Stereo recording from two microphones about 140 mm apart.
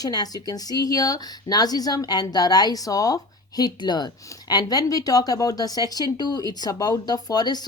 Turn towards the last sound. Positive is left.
turn(degrees=30)  # may be behind; listen again after turning